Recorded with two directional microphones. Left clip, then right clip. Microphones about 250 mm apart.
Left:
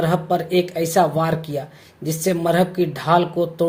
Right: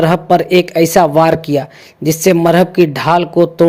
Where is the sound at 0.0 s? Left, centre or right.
Right.